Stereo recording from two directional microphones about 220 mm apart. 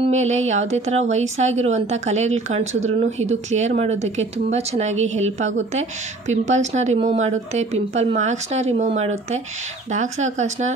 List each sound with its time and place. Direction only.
0.0 s a woman's voice: 30° right (ahead or behind)